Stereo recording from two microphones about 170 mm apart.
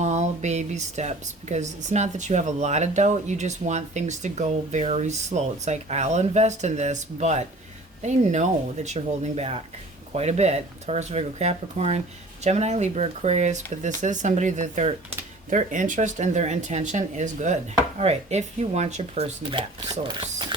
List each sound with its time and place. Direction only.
0.0 s speech: 40° right (ahead or behind)
19.4 s speech: 25° right (ahead or behind)